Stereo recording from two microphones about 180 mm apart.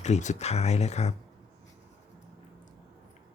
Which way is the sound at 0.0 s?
40° left (ahead or behind).